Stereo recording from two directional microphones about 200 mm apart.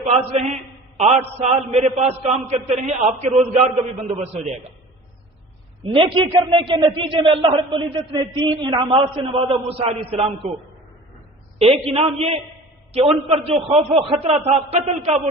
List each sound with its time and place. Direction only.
0.0 s a man's voice: 30° right (ahead or behind)
5.8 s a man's voice: 25° right (ahead or behind)
11.6 s a man's voice: 30° right (ahead or behind)